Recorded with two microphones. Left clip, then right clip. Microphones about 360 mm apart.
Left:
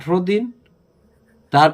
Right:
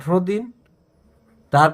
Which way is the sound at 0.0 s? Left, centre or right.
Right.